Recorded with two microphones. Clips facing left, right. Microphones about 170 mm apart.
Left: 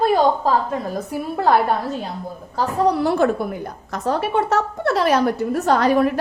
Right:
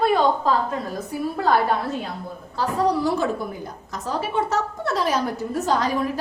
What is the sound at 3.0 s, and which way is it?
A woman's voice, 65° left (ahead or behind).